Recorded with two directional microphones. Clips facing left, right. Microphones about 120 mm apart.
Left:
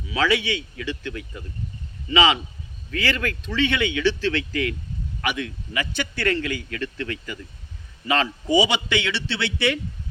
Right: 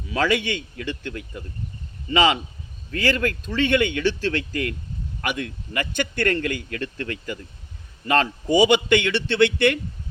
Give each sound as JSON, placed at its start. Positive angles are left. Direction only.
{"t": 0.1, "sound": "a man's voice", "side_deg": -45}